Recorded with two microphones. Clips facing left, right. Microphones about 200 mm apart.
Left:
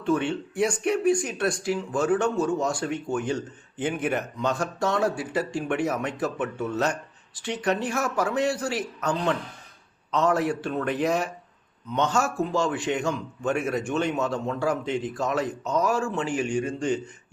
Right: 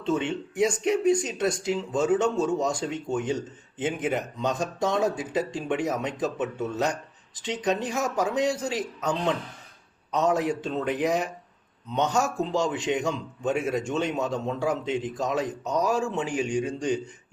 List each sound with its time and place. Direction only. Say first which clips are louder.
0.0 s a man's voice: left 2 dB; 20° right (ahead or behind)